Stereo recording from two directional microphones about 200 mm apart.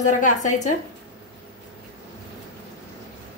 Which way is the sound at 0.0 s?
40° left (ahead or behind).